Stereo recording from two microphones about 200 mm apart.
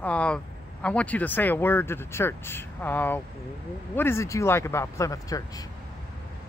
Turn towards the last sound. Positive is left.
turn(degrees=15)  # may be behind; listen again after turning